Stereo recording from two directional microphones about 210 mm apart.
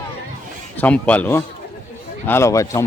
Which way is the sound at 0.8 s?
5° left (ahead or behind).